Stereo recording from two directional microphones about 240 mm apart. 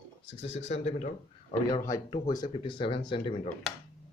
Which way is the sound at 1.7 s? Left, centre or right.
Centre.